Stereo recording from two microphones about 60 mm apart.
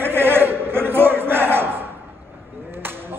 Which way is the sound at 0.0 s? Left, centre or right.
Right.